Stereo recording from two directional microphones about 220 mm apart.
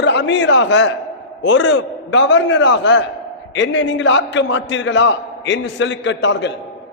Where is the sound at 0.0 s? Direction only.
50° left (ahead or behind).